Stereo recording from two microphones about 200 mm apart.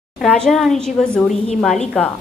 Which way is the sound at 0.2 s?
Centre (ahead or behind).